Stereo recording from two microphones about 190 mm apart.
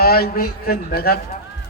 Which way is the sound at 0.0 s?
55° left (ahead or behind).